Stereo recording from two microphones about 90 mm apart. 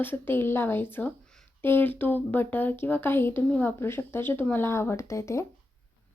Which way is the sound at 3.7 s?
25° left (ahead or behind).